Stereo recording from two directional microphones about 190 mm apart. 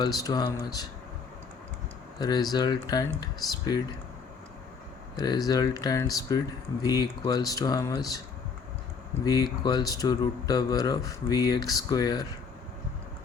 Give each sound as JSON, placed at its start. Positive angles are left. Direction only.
{"t": 0.0, "sound": "speech", "side_deg": 20}
{"t": 2.1, "sound": "speech", "side_deg": 20}
{"t": 5.1, "sound": "speech", "side_deg": 20}
{"t": 9.2, "sound": "speech", "side_deg": 20}